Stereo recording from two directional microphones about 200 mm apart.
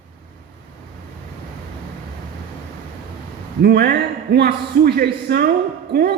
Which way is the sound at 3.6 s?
50° right (ahead or behind).